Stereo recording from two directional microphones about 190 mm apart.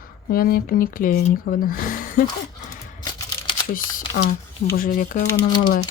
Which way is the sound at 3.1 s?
25° left (ahead or behind).